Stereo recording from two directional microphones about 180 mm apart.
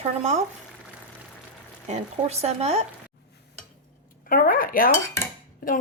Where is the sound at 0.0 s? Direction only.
40° right (ahead or behind).